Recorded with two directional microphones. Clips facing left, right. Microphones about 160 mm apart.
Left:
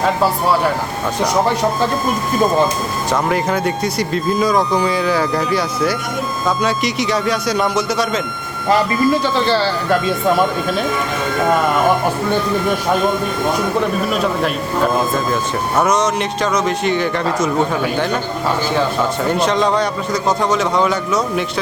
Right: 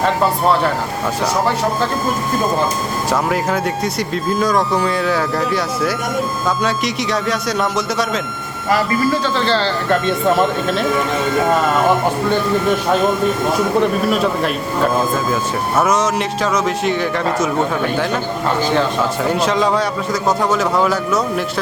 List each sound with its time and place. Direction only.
3.1 s speech: centre (ahead or behind)
8.7 s speech: 15° left (ahead or behind)
9.9 s speech: centre (ahead or behind)
14.9 s speech: 5° right (ahead or behind)
19.3 s speech: 5° right (ahead or behind)